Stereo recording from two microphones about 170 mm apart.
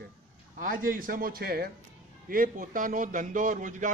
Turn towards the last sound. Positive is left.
turn(degrees=-50)  # may be behind; listen again after turning